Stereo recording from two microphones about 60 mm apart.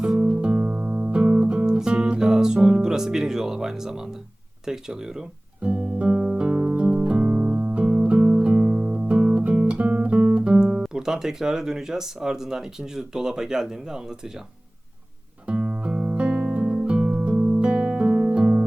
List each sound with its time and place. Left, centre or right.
0.0 s music: centre
4.6 s speech: centre
5.6 s music: right
15.4 s guitar: centre